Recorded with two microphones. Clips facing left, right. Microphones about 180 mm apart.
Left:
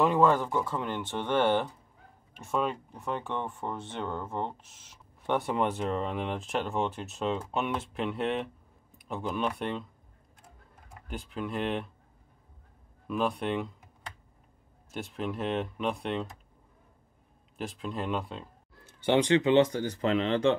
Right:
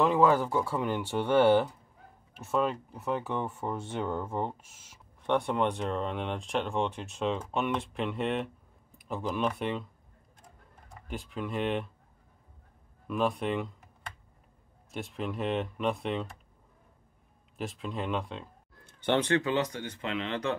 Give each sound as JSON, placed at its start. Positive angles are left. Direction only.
{"t": 0.0, "sound": "speech", "side_deg": -5}
{"t": 5.2, "sound": "speech", "side_deg": 5}
{"t": 11.1, "sound": "speech", "side_deg": 0}
{"t": 13.0, "sound": "speech", "side_deg": 0}
{"t": 14.9, "sound": "speech", "side_deg": 0}
{"t": 17.6, "sound": "speech", "side_deg": 0}